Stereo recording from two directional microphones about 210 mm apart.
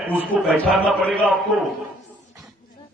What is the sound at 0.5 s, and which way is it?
Speech, centre (ahead or behind).